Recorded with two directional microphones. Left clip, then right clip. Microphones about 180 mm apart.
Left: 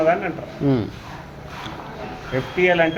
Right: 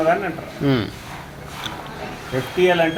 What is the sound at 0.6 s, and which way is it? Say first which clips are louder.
Speech: right 1 dB; 10° left (ahead or behind).